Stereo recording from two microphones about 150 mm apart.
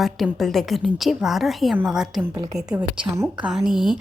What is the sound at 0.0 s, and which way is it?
A woman's voice, centre (ahead or behind).